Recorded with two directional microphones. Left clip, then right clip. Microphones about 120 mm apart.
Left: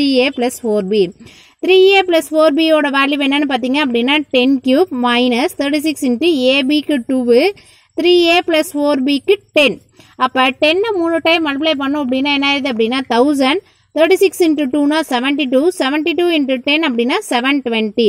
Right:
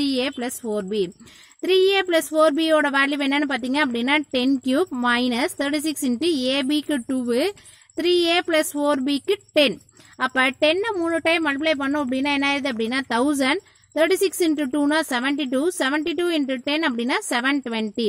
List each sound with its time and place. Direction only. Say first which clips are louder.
0.0 s a woman's voice: left 10 dB; 20° left (ahead or behind)
1.6 s speech: left 9 dB; 5° left (ahead or behind)